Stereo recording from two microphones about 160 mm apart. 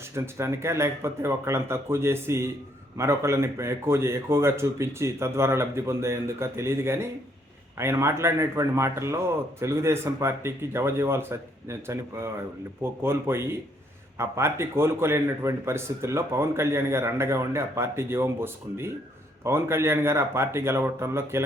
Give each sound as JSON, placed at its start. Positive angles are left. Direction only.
{"t": 0.1, "sound": "a man's voice", "side_deg": -15}